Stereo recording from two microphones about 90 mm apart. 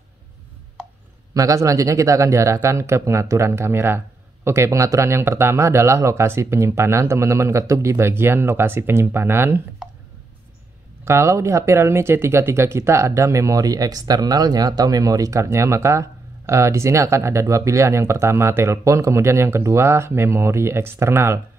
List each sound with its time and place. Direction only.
1.3 s speech: 35° right (ahead or behind)
11.1 s speech: 30° right (ahead or behind)